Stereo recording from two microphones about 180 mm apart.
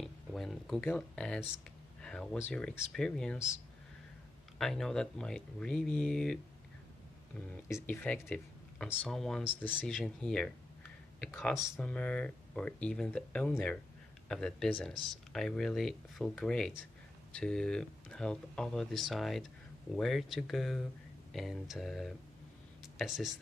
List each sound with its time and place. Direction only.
0.0 s a sound: centre (ahead or behind)
2.0 s speech: 5° left (ahead or behind)
4.6 s speech: centre (ahead or behind)
7.6 s speech: 10° left (ahead or behind)